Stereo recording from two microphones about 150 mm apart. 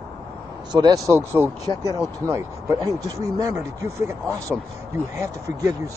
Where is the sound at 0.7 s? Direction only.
25° right (ahead or behind).